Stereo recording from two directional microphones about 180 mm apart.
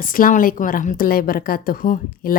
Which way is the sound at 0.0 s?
50° left (ahead or behind).